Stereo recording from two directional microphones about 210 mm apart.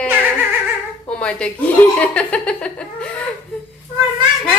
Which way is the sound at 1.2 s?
5° left (ahead or behind).